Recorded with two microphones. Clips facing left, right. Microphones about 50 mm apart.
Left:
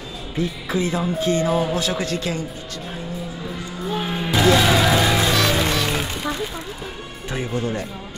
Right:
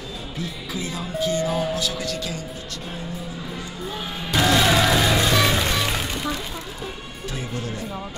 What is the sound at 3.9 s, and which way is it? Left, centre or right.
Music, left.